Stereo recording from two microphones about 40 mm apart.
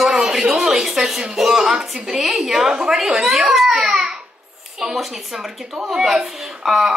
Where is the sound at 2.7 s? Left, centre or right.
Right.